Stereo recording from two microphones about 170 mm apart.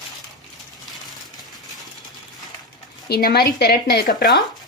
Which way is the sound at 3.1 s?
65° left (ahead or behind).